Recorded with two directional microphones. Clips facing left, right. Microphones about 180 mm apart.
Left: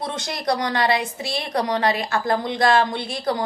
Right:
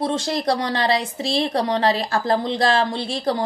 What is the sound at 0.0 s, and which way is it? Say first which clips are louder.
A woman's voice: right 5 dB; 30° right (ahead or behind).